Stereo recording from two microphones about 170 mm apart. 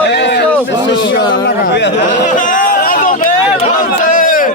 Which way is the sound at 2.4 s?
50° left (ahead or behind).